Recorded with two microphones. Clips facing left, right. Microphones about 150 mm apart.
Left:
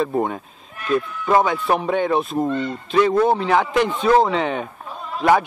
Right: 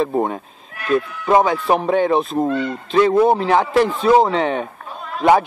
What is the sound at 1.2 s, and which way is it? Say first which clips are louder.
Speech: right 3 dB; 25° right (ahead or behind).